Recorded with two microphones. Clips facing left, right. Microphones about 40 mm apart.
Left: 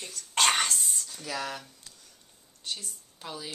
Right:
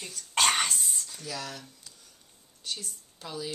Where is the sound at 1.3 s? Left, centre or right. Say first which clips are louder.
Left 4 dB; left.